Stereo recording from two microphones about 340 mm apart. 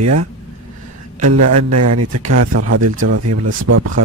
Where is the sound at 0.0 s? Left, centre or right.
Right.